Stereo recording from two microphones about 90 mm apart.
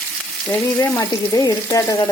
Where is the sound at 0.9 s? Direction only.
40° left (ahead or behind).